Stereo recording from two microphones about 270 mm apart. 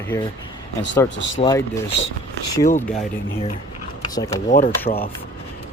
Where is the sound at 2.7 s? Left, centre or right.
Centre.